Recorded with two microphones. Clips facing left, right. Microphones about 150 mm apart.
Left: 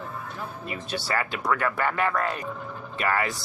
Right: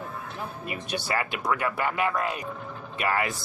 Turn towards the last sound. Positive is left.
turn(degrees=-20)  # may be behind; listen again after turning